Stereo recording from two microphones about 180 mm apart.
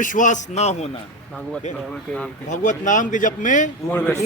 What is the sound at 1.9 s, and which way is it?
Speech, 5° left (ahead or behind).